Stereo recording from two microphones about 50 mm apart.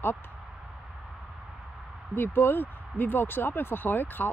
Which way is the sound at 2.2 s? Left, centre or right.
Left.